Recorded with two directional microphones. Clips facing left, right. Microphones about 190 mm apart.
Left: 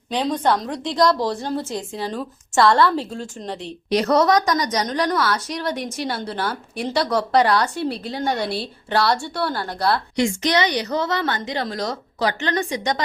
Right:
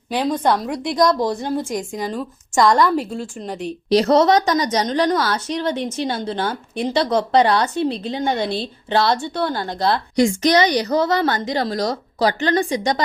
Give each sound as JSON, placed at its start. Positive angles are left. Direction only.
{"t": 0.1, "sound": "a woman's voice", "side_deg": -10}
{"t": 3.8, "sound": "a woman's voice", "side_deg": -30}
{"t": 10.2, "sound": "a woman's voice", "side_deg": -40}